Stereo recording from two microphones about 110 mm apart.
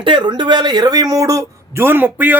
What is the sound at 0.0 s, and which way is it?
Speech, 45° right (ahead or behind).